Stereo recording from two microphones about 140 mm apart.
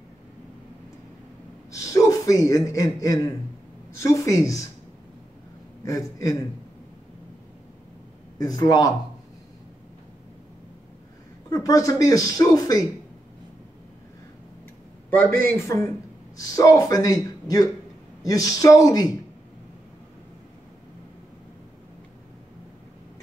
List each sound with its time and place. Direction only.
1.7 s a man's voice: 20° left (ahead or behind)
5.9 s speech: 25° left (ahead or behind)
8.4 s speech: 30° left (ahead or behind)
11.5 s speech: 25° left (ahead or behind)
15.0 s a man's voice: 15° left (ahead or behind)